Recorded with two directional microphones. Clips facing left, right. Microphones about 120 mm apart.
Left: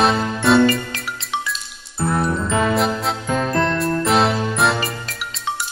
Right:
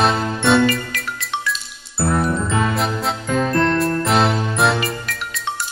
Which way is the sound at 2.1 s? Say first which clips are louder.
Left 1 dB; centre (ahead or behind).